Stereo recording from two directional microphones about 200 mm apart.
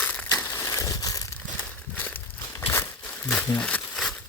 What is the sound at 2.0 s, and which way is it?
Crumpling, 10° left (ahead or behind).